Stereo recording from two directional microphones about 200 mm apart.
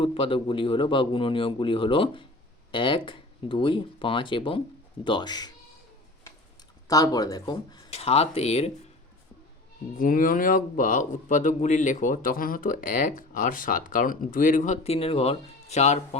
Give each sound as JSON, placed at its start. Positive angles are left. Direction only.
{"t": 0.0, "sound": "a man's voice", "side_deg": 25}
{"t": 6.8, "sound": "a man's voice", "side_deg": 20}
{"t": 10.0, "sound": "speech", "side_deg": 45}